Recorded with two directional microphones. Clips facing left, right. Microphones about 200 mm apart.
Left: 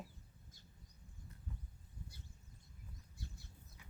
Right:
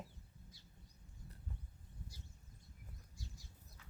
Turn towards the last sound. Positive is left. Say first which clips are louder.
# left 2 dB
turn(degrees=60)  # may be behind; listen again after turning